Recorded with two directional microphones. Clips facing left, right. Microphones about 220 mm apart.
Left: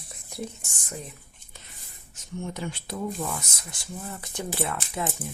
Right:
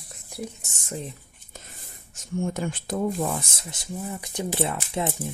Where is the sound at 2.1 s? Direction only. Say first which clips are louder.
Right 6 dB; 50° right (ahead or behind).